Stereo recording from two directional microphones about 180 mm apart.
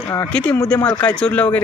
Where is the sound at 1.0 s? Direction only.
5° left (ahead or behind).